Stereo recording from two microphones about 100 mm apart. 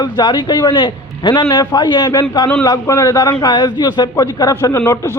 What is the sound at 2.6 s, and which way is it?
A man's voice, 35° left (ahead or behind).